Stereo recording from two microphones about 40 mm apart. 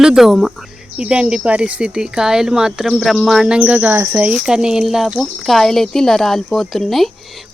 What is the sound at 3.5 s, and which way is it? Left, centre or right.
Speech, right.